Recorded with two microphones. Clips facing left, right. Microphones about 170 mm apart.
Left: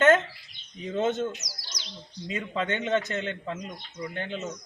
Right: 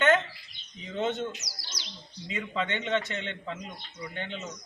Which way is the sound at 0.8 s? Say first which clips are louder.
Left 4 dB; 45° left (ahead or behind).